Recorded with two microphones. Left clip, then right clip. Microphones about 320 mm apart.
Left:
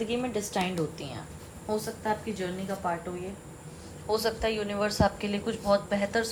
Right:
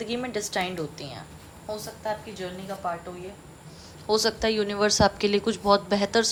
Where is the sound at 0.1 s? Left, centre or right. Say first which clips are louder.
Right 1 dB; right.